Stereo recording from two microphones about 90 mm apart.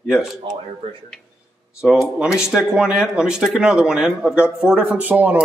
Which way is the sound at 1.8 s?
5° right (ahead or behind).